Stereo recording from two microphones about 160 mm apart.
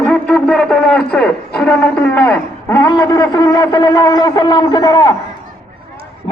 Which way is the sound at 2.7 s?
25° left (ahead or behind).